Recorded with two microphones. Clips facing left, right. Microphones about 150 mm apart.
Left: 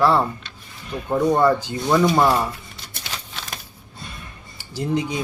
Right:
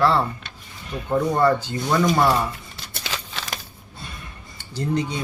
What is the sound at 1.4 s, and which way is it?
Speech, 10° left (ahead or behind).